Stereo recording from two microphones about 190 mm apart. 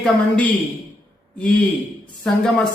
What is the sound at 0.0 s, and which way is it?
Speech, 5° left (ahead or behind).